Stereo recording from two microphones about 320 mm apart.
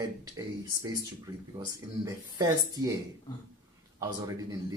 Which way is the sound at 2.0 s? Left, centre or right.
Centre.